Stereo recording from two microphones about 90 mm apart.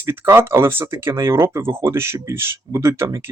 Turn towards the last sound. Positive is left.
turn(degrees=-30)  # may be behind; listen again after turning